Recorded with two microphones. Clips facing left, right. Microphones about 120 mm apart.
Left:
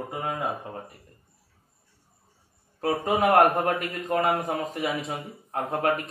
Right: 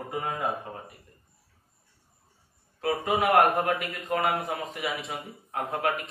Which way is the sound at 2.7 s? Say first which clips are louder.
Left 2 dB; 40° left (ahead or behind).